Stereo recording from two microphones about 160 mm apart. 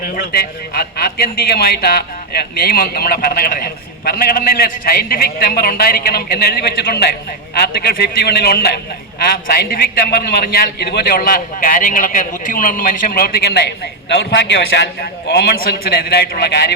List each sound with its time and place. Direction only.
0.2 s a man's voice: 75° left (ahead or behind)
14.1 s a man's voice: 90° left